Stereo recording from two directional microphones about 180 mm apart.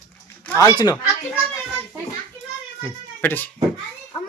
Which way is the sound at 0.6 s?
20° left (ahead or behind).